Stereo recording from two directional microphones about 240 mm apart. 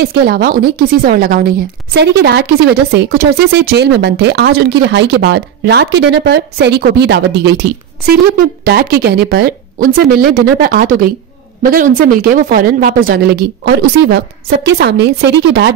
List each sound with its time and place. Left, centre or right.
0.0 s speech: right
8.6 s speech: right